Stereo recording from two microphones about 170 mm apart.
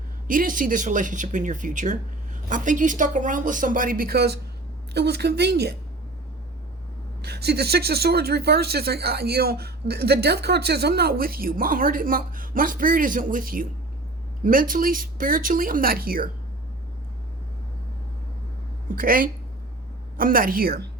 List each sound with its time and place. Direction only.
0.3 s speech: 55° right (ahead or behind); by 5.7 s 75° right (ahead or behind)
7.2 s speech: 70° right (ahead or behind)
18.9 s speech: 55° right (ahead or behind)